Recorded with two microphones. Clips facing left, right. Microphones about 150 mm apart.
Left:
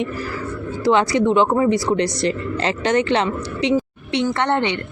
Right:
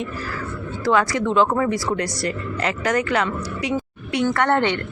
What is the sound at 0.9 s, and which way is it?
Speech, 20° left (ahead or behind).